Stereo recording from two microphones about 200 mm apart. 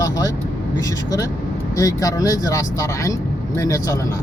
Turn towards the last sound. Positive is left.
turn(degrees=15)  # may be behind; listen again after turning